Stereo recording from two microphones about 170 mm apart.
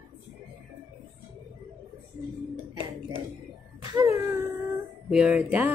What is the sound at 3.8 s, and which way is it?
Whimper, 15° right (ahead or behind).